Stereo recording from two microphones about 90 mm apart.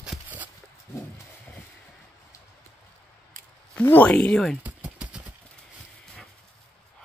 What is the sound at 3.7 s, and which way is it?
Speech, 20° left (ahead or behind).